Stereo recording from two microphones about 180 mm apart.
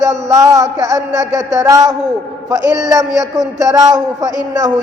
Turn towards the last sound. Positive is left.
turn(degrees=-20)  # may be behind; listen again after turning